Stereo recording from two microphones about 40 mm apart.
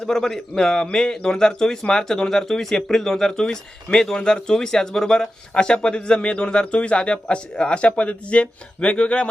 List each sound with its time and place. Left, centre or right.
0.0 s a man's voice: centre; by 9.3 s left